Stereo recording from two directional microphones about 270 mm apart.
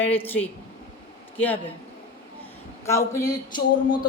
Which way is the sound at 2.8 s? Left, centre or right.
Centre.